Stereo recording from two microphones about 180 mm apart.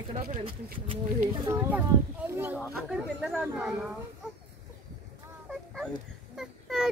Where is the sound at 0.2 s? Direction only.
50° right (ahead or behind).